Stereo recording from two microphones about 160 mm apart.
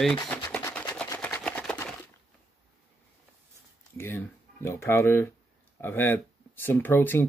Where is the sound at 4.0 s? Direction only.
15° left (ahead or behind).